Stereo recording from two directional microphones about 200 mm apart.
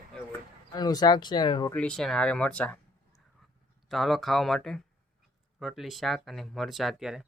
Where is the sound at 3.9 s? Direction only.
Centre (ahead or behind).